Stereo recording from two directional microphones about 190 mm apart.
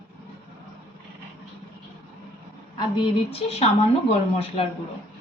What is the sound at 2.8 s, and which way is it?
Speech, 25° left (ahead or behind).